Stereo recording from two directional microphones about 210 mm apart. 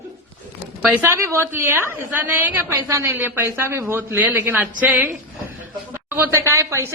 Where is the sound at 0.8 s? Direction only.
5° right (ahead or behind).